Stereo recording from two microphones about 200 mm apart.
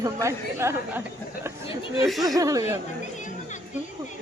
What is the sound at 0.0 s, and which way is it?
A woman's voice, 15° right (ahead or behind).